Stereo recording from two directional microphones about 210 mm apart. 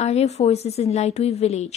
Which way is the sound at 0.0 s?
30° left (ahead or behind).